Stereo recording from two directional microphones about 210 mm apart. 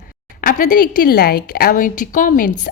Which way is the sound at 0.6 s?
40° left (ahead or behind).